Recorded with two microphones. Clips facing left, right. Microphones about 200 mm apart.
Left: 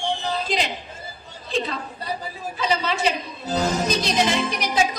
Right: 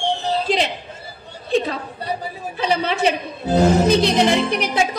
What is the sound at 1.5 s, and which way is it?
A woman's voice, 60° right (ahead or behind).